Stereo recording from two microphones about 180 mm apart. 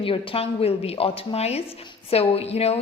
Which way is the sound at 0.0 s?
30° left (ahead or behind).